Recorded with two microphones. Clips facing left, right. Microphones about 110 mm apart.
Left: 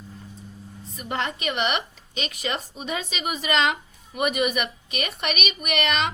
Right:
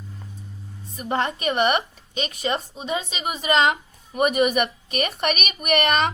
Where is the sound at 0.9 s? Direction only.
30° right (ahead or behind).